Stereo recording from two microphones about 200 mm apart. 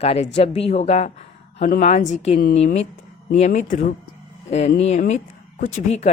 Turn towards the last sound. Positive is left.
turn(degrees=35)  # may be behind; listen again after turning